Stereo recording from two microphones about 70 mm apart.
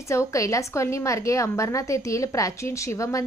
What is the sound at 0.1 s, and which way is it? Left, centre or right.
A woman's voice, left.